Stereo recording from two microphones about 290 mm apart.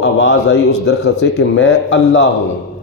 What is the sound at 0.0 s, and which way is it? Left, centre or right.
Speech, left.